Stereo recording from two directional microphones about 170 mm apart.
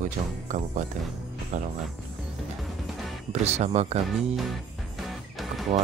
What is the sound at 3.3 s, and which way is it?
Speech, 40° right (ahead or behind).